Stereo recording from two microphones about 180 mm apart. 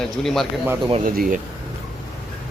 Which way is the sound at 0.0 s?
Centre (ahead or behind).